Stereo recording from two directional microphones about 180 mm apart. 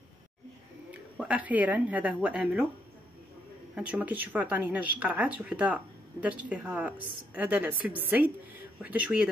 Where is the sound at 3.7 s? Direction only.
5° right (ahead or behind).